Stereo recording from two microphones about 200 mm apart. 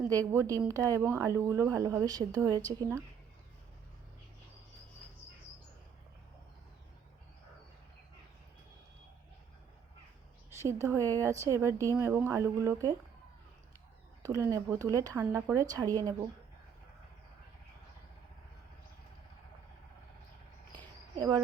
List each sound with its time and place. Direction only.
0.1 s speech: 15° right (ahead or behind)
10.5 s speech: 15° right (ahead or behind)
14.2 s speech: 15° right (ahead or behind)
21.2 s speech: 20° right (ahead or behind)